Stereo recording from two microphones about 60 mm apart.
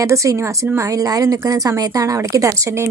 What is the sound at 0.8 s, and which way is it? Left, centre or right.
A woman's voice, right.